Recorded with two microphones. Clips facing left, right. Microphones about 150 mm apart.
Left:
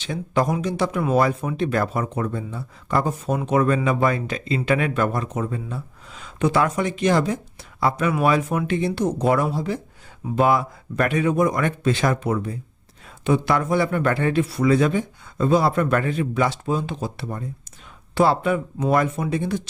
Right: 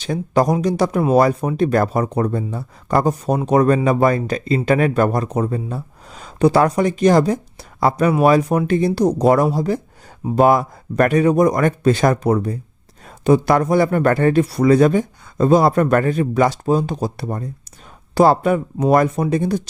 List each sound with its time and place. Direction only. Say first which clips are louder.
0.0 s speech: right 5 dB; 40° right (ahead or behind)